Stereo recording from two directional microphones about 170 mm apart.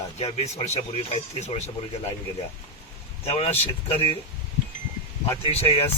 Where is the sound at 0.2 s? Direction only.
40° left (ahead or behind).